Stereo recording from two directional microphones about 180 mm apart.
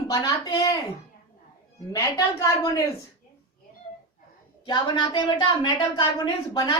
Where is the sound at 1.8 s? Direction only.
20° left (ahead or behind).